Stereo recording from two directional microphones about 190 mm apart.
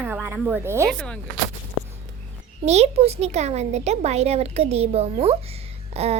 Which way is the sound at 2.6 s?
35° right (ahead or behind).